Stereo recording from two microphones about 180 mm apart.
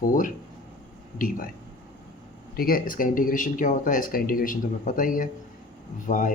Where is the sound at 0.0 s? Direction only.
50° left (ahead or behind).